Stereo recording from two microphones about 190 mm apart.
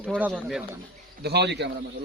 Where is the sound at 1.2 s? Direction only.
60° right (ahead or behind).